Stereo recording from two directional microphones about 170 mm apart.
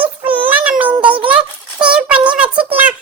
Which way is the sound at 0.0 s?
10° right (ahead or behind).